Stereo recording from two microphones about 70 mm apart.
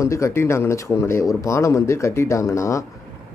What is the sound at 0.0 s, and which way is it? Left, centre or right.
Speech, left.